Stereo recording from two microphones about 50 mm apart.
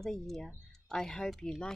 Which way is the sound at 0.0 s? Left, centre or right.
Centre.